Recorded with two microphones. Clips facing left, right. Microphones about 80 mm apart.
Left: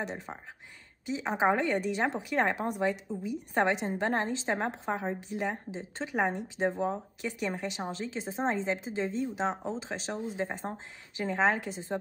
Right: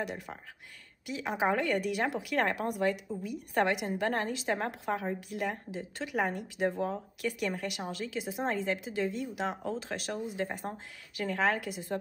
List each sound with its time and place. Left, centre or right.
0.0 s speech: left